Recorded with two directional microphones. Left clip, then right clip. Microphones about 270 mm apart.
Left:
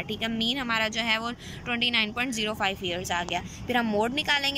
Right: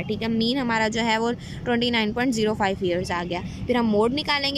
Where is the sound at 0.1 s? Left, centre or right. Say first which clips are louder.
Right 4 dB; centre.